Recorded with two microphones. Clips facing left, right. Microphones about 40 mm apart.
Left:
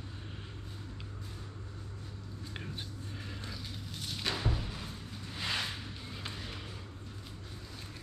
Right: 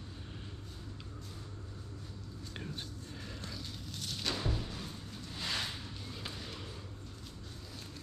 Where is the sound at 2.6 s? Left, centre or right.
Centre.